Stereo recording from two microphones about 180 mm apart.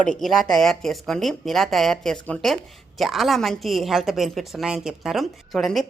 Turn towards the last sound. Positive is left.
turn(degrees=0)  # may be behind; listen again after turning